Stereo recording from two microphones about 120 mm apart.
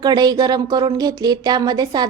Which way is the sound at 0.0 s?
35° right (ahead or behind).